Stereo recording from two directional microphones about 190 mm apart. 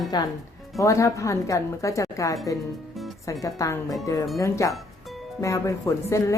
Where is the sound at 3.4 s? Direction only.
15° left (ahead or behind).